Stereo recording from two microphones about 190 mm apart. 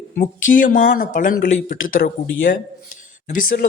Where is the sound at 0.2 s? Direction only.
45° left (ahead or behind).